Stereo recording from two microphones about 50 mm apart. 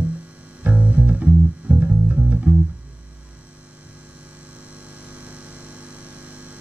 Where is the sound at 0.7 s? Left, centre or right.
Right.